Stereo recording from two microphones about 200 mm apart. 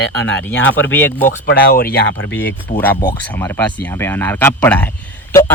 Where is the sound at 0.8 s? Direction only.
10° left (ahead or behind).